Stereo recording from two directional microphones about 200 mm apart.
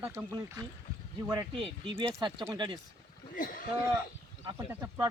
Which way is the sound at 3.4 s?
45° left (ahead or behind).